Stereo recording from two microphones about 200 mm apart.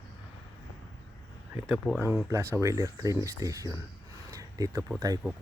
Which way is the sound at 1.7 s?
10° right (ahead or behind).